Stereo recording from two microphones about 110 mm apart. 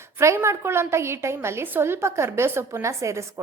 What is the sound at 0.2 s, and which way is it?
A woman's voice, 25° right (ahead or behind).